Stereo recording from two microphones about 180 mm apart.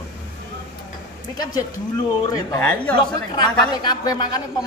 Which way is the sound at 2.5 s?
10° left (ahead or behind).